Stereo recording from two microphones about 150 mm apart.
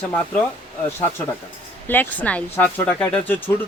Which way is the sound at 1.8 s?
10° left (ahead or behind).